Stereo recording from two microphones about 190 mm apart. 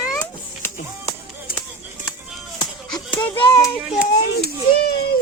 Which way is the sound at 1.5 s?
50° left (ahead or behind).